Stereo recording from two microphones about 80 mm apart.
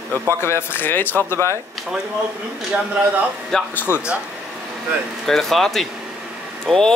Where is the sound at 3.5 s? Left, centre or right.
Centre.